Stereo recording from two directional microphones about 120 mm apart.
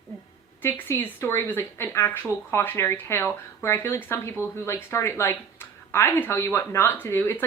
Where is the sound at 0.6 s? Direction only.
15° left (ahead or behind).